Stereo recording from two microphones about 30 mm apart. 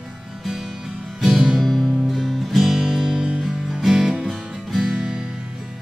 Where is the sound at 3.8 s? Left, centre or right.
Centre.